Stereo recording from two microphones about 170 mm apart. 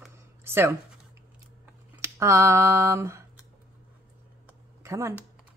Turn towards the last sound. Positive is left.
turn(degrees=-15)  # may be behind; listen again after turning